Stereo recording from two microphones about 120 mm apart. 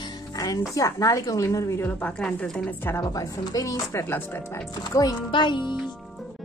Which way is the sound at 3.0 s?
30° left (ahead or behind).